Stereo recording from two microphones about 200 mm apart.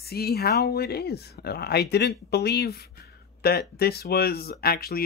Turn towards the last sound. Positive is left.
turn(degrees=50)  # may be behind; listen again after turning